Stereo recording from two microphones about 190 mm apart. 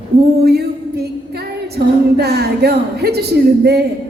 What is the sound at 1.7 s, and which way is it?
A woman's voice, 60° right (ahead or behind).